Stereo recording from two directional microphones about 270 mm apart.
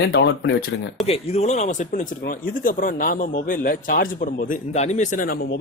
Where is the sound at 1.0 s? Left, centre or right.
Left.